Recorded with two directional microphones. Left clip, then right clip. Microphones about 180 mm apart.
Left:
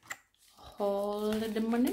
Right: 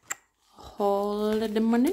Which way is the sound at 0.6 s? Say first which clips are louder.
Right 6 dB; 40° right (ahead or behind).